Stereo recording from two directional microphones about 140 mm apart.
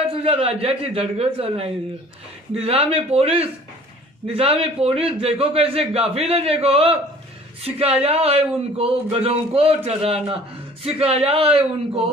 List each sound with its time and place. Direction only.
0.2 s a man's voice: 45° right (ahead or behind)